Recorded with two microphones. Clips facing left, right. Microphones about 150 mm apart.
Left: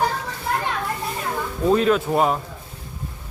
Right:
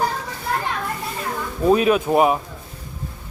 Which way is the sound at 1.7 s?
15° right (ahead or behind).